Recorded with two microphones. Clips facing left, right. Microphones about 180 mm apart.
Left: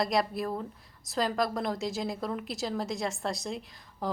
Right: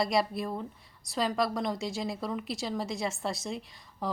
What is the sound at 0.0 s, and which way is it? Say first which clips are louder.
A woman's voice: even; centre (ahead or behind).